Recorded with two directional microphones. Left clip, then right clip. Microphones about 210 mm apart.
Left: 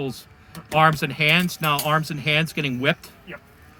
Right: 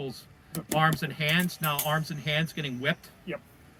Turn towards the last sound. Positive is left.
turn(degrees=45)  # may be behind; listen again after turning